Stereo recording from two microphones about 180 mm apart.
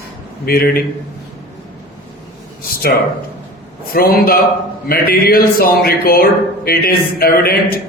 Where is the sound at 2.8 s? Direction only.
60° left (ahead or behind).